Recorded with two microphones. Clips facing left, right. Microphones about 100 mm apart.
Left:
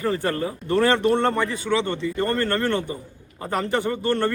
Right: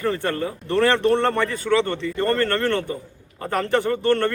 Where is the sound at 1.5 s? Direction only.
20° left (ahead or behind).